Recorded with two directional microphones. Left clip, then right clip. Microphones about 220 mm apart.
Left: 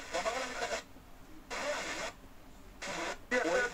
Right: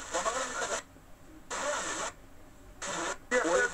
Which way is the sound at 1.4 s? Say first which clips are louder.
Right 3 dB; 20° right (ahead or behind).